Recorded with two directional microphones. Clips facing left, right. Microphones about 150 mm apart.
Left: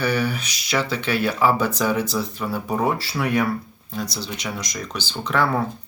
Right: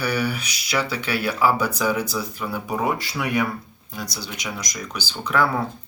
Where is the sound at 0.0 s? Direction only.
10° right (ahead or behind).